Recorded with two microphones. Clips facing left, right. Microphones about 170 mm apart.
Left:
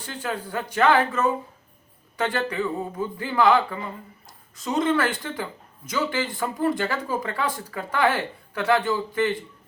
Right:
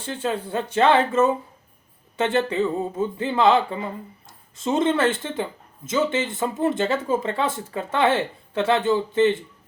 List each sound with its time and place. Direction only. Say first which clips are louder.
0.0 s speech: right 4 dB; 25° right (ahead or behind)